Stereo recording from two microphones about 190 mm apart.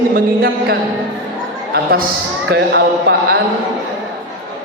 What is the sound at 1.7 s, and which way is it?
A man's voice, 55° right (ahead or behind).